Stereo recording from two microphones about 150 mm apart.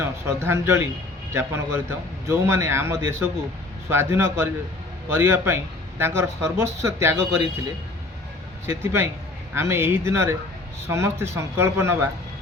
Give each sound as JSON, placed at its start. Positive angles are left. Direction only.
{"t": 0.0, "sound": "speech", "side_deg": -15}
{"t": 8.6, "sound": "speech", "side_deg": -15}